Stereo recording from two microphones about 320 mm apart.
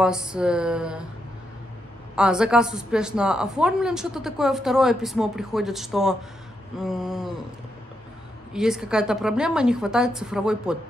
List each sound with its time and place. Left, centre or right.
0.0 s a woman's voice: centre
2.1 s a woman's voice: centre
8.5 s a woman's voice: centre